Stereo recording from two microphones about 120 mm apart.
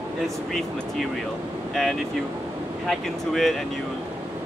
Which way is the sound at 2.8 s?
Centre (ahead or behind).